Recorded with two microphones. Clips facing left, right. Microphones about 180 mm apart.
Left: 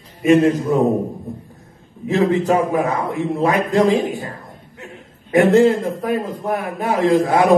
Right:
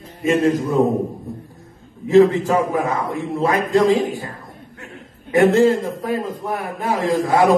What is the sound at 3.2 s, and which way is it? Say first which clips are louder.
A man's voice: left 2 dB; 20° left (ahead or behind).